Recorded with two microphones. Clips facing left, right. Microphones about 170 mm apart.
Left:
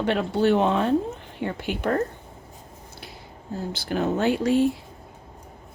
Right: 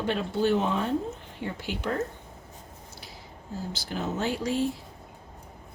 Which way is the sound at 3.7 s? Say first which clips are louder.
Left 8 dB; 60° left (ahead or behind).